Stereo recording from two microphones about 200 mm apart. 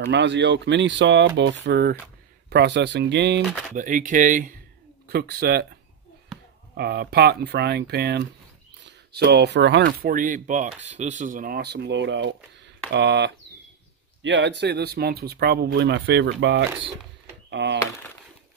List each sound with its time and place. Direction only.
0.1 s speech: 60° right (ahead or behind)
3.7 s speech: 40° right (ahead or behind)
6.8 s speech: 55° right (ahead or behind)